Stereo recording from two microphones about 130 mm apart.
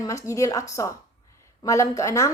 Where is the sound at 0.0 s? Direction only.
25° left (ahead or behind).